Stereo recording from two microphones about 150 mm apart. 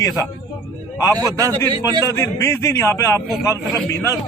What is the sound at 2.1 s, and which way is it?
A man's voice, 20° left (ahead or behind).